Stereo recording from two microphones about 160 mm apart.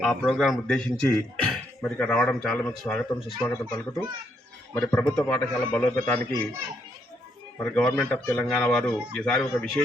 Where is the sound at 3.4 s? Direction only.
20° left (ahead or behind).